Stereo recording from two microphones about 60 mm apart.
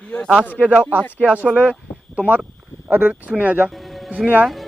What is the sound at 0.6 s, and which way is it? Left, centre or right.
Speech, right.